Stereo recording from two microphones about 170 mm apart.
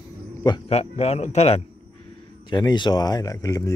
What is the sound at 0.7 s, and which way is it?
Speech, 40° left (ahead or behind).